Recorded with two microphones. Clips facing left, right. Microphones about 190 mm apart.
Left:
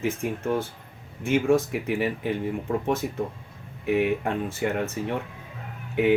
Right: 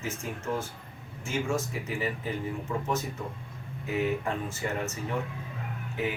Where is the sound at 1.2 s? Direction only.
60° left (ahead or behind).